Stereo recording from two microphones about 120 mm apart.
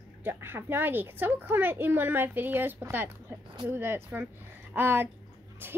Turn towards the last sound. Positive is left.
turn(degrees=-20)  # may be behind; listen again after turning